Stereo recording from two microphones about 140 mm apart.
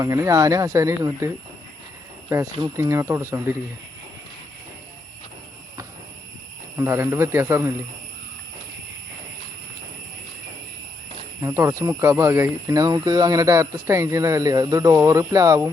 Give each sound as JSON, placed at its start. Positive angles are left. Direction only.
{"t": 0.0, "sound": "speech", "side_deg": -25}
{"t": 2.3, "sound": "speech", "side_deg": -20}
{"t": 6.7, "sound": "speech", "side_deg": -20}
{"t": 11.3, "sound": "speech", "side_deg": -20}